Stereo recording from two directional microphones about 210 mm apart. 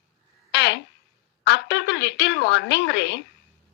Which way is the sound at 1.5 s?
55° left (ahead or behind).